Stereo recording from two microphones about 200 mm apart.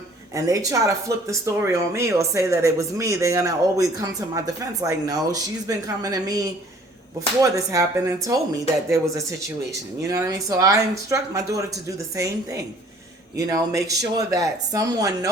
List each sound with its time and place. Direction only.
0.3 s speech: 15° right (ahead or behind)